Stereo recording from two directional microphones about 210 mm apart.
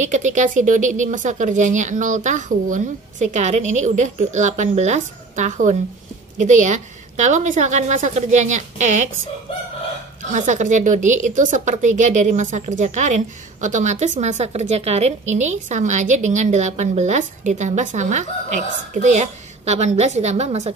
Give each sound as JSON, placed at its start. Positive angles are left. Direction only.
{"t": 0.1, "sound": "speech", "side_deg": -35}
{"t": 10.3, "sound": "speech", "side_deg": -35}